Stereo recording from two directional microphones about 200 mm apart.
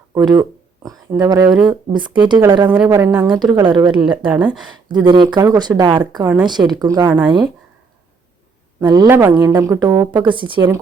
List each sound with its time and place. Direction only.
0.1 s speech: 20° right (ahead or behind)
2.6 s a woman's voice: 10° right (ahead or behind)
8.8 s a woman's voice: 20° right (ahead or behind)